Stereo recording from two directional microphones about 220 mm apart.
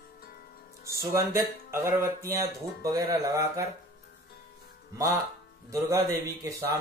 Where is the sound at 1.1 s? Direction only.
10° right (ahead or behind).